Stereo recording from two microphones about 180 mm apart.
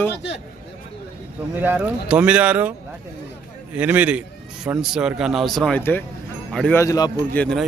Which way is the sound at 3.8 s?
10° right (ahead or behind).